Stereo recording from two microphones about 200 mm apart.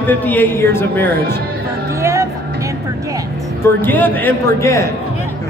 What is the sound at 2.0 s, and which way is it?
Music, 15° right (ahead or behind).